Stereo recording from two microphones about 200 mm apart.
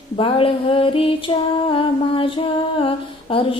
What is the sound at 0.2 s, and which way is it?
Music, 25° left (ahead or behind).